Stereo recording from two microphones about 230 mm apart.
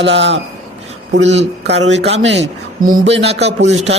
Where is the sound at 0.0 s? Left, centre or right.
Right.